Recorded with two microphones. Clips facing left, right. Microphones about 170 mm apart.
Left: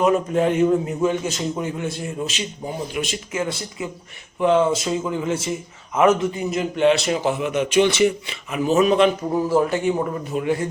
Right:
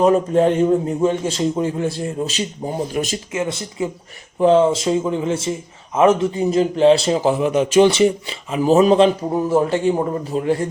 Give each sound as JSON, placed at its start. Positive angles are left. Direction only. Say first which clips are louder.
{"t": 0.0, "sound": "speech", "louder": "right 4 dB", "side_deg": -35}
{"t": 3.3, "sound": "speech", "louder": "right 2 dB", "side_deg": -25}